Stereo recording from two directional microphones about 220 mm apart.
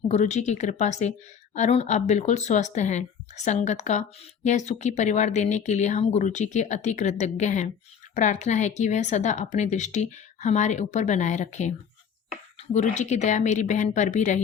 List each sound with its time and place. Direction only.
0.1 s a woman's voice: 30° left (ahead or behind)
12.7 s a woman's voice: 30° left (ahead or behind)